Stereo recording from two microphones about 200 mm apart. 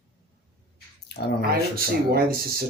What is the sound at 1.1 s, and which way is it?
Drip, 55° left (ahead or behind).